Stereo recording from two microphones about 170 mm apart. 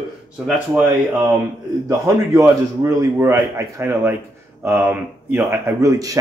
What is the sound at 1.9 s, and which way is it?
A man's voice, 15° right (ahead or behind).